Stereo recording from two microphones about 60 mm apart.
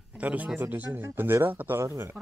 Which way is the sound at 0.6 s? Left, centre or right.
Right.